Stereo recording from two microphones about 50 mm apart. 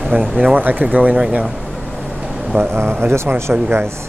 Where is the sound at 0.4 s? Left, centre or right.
Right.